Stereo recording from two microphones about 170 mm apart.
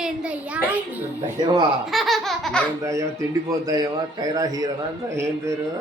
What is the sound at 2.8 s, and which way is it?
A man's voice, 15° right (ahead or behind).